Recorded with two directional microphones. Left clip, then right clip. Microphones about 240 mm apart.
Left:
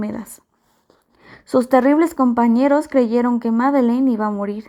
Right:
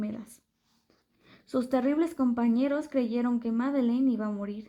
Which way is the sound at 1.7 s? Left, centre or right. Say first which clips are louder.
Left 13 dB; left.